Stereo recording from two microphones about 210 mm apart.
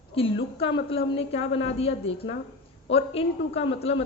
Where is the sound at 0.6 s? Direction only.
25° left (ahead or behind).